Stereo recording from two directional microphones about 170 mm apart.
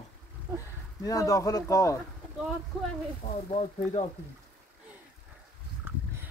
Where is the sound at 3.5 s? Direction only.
40° left (ahead or behind).